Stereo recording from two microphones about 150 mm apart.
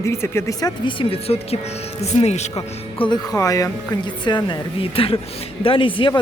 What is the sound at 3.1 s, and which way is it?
Speech, 20° left (ahead or behind).